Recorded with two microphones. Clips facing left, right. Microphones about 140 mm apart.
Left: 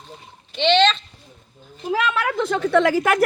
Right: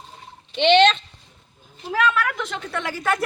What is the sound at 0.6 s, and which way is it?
Speech, 15° right (ahead or behind).